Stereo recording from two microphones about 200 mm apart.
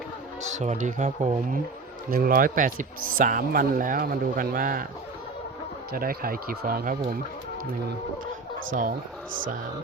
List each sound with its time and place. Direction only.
0.4 s speech: 35° right (ahead or behind)
5.9 s speech: 45° right (ahead or behind)